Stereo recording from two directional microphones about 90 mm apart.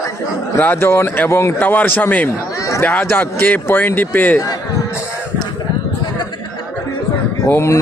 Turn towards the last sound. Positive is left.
turn(degrees=30)  # may be behind; listen again after turning